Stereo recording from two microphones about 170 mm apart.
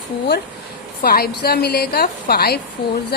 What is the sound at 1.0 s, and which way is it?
A woman's voice, 65° left (ahead or behind).